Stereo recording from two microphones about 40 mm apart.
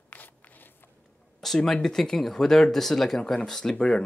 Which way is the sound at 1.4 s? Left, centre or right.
Centre.